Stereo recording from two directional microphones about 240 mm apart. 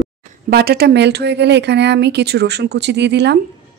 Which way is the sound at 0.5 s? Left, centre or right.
Right.